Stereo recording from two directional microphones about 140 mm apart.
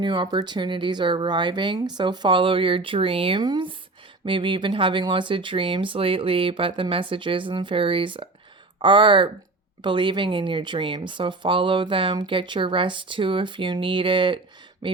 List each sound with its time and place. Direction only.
0.0 s speech: 35° right (ahead or behind)